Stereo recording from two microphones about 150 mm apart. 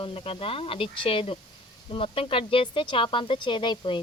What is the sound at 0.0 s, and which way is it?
Speech, 35° left (ahead or behind).